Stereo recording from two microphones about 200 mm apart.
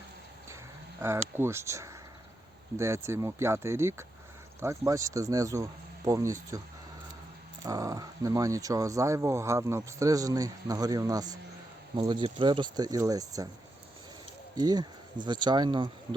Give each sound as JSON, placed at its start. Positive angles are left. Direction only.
{"t": 1.0, "sound": "speech", "side_deg": -15}
{"t": 7.6, "sound": "speech", "side_deg": -15}
{"t": 14.5, "sound": "speech", "side_deg": -20}